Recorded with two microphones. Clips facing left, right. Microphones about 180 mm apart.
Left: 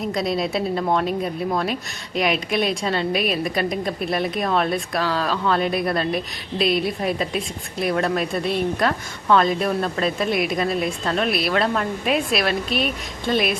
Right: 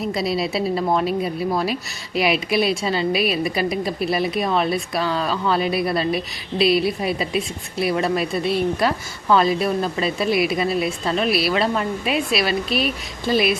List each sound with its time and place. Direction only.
0.0 s speech: 5° right (ahead or behind)